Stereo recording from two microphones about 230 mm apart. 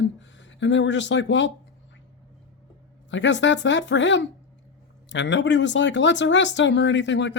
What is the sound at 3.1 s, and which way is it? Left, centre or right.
Speech, left.